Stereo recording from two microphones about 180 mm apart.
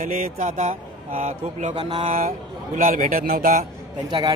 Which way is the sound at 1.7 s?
30° right (ahead or behind).